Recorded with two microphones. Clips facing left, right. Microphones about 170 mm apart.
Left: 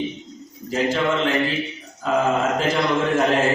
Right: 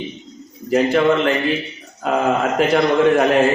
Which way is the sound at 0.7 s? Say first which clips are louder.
Right 6 dB; 60° right (ahead or behind).